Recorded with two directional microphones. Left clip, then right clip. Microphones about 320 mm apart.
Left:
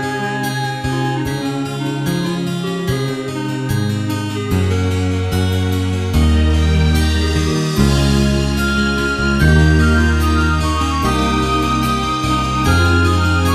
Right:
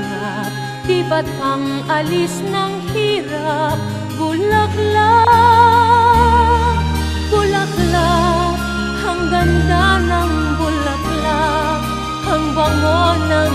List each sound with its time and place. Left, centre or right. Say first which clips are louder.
4.9 s music: right 13 dB; right
9.4 s music: right 1 dB; left
11.2 s music: right 1 dB; left